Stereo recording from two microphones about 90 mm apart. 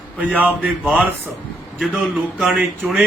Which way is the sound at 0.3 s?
20° right (ahead or behind).